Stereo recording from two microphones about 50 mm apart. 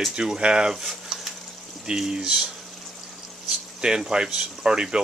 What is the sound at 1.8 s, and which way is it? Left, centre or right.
Speech, centre.